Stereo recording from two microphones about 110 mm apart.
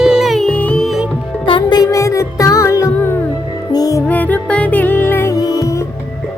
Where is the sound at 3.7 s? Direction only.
35° left (ahead or behind).